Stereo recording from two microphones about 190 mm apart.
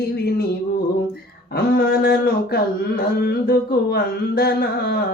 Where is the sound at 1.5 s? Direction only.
55° left (ahead or behind).